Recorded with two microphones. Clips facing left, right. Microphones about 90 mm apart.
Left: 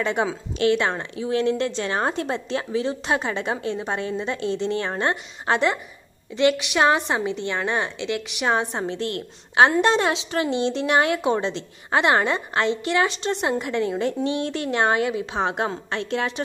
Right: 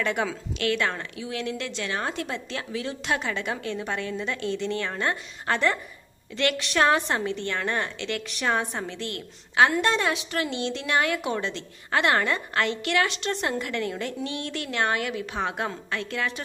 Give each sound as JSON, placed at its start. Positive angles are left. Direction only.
{"t": 0.0, "sound": "a woman's voice", "side_deg": 25}